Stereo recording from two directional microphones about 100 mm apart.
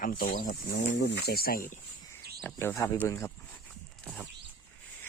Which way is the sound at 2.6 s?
25° left (ahead or behind).